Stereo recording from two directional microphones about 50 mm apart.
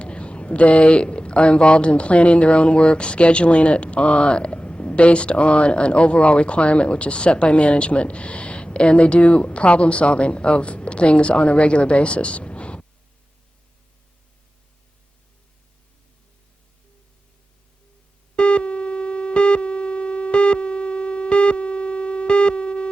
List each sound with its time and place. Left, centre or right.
0.0 s speech: left
18.3 s busy signal: left